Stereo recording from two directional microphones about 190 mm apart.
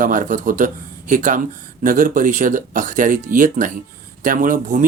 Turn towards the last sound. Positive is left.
turn(degrees=-40)  # may be behind; listen again after turning